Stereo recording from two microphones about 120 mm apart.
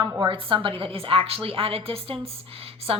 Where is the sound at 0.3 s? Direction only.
45° right (ahead or behind).